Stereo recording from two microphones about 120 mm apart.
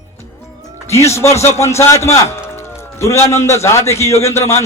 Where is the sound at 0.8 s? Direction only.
25° left (ahead or behind).